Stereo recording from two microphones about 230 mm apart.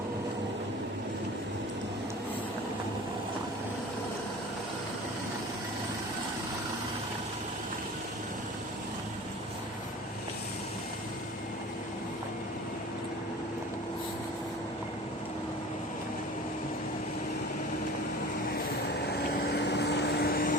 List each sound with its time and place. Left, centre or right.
18.5 s vehicle: left